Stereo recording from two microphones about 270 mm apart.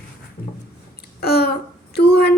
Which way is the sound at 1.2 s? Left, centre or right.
Left.